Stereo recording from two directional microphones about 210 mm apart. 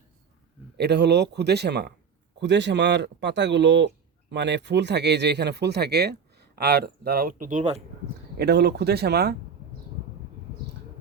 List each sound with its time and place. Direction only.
0.8 s speech: 55° right (ahead or behind); by 7.8 s 35° right (ahead or behind)
8.4 s speech: 50° right (ahead or behind)